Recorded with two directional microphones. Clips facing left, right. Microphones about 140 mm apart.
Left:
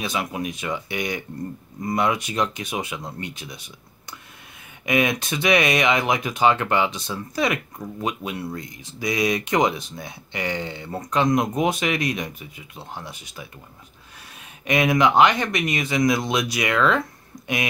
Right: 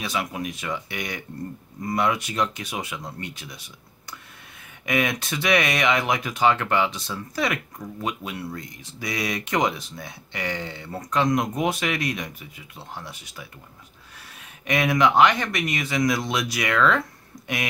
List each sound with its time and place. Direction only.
0.0 s speech: 20° left (ahead or behind)
4.8 s speech: 20° left (ahead or behind)